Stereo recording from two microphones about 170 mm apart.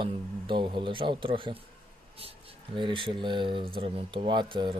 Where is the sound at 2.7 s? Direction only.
30° right (ahead or behind).